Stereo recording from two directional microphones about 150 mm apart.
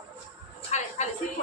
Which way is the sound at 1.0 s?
45° left (ahead or behind).